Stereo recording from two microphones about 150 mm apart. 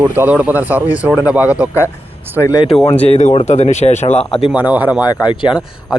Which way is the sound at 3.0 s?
45° left (ahead or behind).